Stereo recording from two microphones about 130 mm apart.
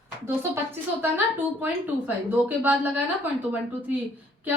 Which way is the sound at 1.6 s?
15° right (ahead or behind).